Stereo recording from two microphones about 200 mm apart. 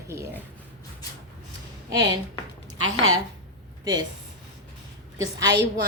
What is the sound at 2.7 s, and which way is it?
Speech, 90° right.